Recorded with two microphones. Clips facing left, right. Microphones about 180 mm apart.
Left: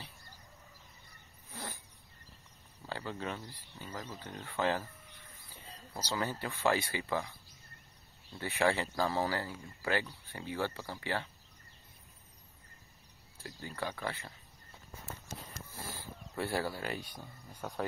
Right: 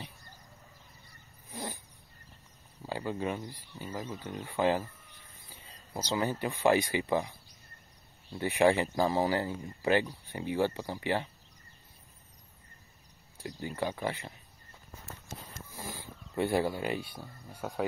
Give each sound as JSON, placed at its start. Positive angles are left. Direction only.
{"t": 1.5, "sound": "a sound", "side_deg": -15}
{"t": 2.9, "sound": "speech", "side_deg": -15}
{"t": 6.1, "sound": "speech", "side_deg": -15}
{"t": 8.4, "sound": "speech", "side_deg": -15}
{"t": 13.4, "sound": "speech", "side_deg": -15}
{"t": 15.7, "sound": "a sound", "side_deg": -15}
{"t": 17.1, "sound": "speech", "side_deg": -10}